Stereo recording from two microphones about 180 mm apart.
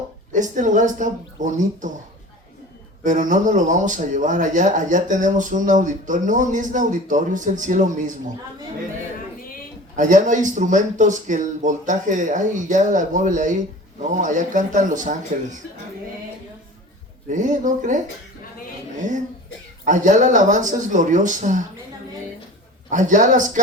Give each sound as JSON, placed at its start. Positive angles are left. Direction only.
{"t": 0.3, "sound": "speech", "side_deg": -45}
{"t": 3.0, "sound": "speech", "side_deg": -45}
{"t": 9.9, "sound": "speech", "side_deg": -45}
{"t": 17.2, "sound": "speech", "side_deg": -45}
{"t": 19.8, "sound": "speech", "side_deg": -45}
{"t": 22.9, "sound": "speech", "side_deg": -45}